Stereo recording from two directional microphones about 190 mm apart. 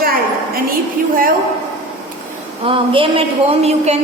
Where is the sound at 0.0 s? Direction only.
50° right (ahead or behind).